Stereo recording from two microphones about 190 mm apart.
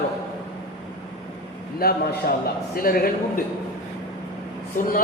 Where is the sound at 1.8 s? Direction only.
55° left (ahead or behind).